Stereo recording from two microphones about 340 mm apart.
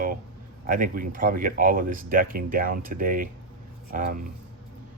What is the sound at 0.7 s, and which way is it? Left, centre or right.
Speech, right.